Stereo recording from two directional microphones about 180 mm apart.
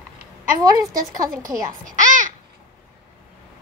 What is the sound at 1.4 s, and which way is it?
Speech, 45° right (ahead or behind).